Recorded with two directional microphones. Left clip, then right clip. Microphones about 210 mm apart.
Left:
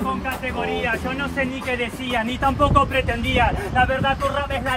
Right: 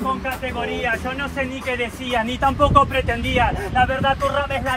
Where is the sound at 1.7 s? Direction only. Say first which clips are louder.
Right 1 dB; centre (ahead or behind).